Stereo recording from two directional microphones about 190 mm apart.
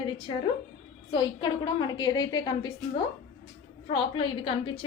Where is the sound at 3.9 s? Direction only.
25° left (ahead or behind).